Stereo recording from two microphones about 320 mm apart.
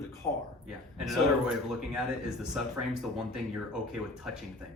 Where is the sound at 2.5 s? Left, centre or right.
Centre.